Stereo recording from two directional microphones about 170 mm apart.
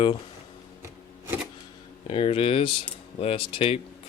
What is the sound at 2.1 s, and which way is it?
Speech, 35° left (ahead or behind).